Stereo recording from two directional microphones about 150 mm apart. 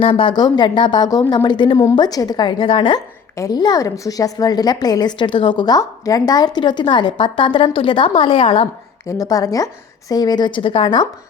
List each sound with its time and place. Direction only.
0.0 s speech: 35° left (ahead or behind)
3.3 s a woman's voice: 25° left (ahead or behind)
9.0 s a woman's voice: 25° left (ahead or behind)